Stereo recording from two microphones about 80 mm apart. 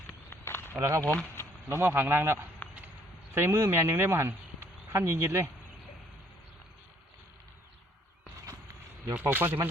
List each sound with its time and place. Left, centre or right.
0.3 s a sound: left
0.8 s speech: right
9.2 s speech: right